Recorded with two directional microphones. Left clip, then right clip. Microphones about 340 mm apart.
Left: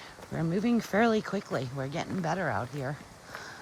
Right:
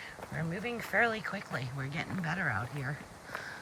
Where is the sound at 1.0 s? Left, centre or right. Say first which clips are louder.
Left 5 dB; centre.